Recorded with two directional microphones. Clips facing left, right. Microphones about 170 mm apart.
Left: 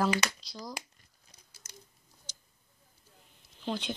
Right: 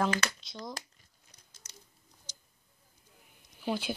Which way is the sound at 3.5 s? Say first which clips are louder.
Right 2 dB; 5° right (ahead or behind).